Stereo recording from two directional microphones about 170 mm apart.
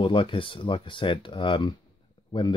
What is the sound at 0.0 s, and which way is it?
Speech, 30° left (ahead or behind).